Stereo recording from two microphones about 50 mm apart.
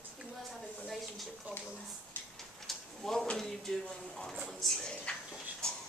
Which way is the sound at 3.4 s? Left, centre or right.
Centre.